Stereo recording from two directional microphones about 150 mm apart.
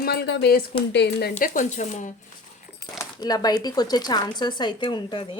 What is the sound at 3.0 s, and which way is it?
Speech, 25° left (ahead or behind).